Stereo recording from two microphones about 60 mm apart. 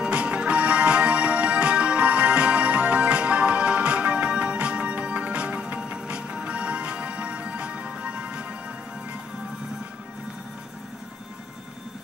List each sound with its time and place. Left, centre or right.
0.0 s music: centre